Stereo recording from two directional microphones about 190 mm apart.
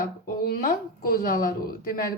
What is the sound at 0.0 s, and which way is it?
Speech, 50° left (ahead or behind).